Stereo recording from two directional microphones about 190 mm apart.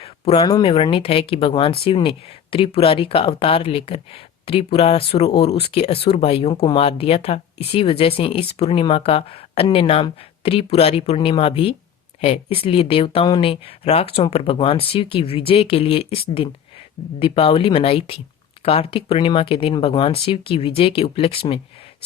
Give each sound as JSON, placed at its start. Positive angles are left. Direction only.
{"t": 0.3, "sound": "speech", "side_deg": 20}
{"t": 0.6, "sound": "speech", "side_deg": 30}